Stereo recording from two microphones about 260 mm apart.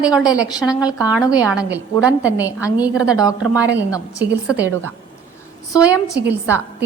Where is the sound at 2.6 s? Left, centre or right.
Centre.